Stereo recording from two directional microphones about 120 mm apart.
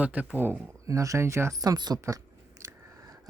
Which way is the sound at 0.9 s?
25° right (ahead or behind).